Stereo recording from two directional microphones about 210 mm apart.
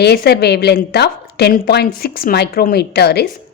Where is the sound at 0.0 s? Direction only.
50° left (ahead or behind).